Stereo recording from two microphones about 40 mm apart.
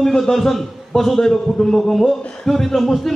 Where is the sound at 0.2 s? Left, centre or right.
Centre.